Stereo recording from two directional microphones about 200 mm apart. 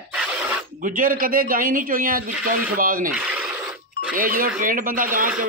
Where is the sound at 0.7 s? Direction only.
45° right (ahead or behind).